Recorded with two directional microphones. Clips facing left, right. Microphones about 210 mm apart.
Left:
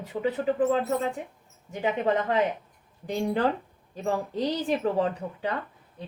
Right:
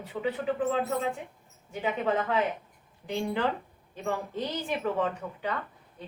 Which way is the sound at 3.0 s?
40° left (ahead or behind).